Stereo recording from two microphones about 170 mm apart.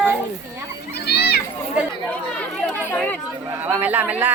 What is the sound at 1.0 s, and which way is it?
Children playing, 70° left (ahead or behind).